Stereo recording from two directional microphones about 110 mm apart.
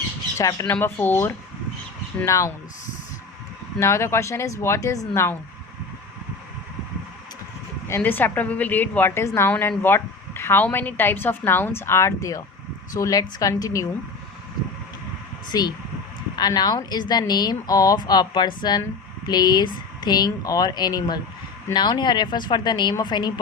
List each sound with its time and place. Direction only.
0.3 s a woman's voice: 30° left (ahead or behind)
3.8 s a woman's voice: 25° left (ahead or behind)
7.9 s a woman's voice: 20° left (ahead or behind)
15.5 s a woman's voice: 35° left (ahead or behind)